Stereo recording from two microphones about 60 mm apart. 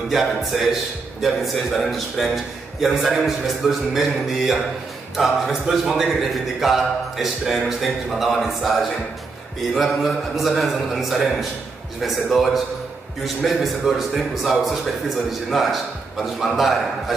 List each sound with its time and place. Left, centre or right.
0.1 s a man's voice: centre